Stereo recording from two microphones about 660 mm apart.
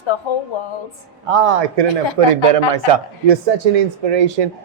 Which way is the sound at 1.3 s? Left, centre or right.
Right.